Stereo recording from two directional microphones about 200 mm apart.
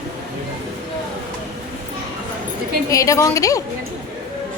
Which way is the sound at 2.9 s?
15° left (ahead or behind).